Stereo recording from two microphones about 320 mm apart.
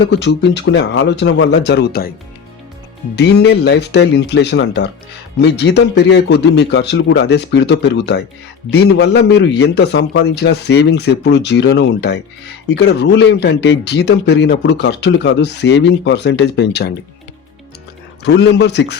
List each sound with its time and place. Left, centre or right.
0.1 s speech: left
3.2 s speech: left
18.2 s speech: left